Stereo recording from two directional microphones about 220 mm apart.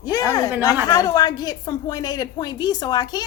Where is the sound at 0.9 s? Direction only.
15° left (ahead or behind).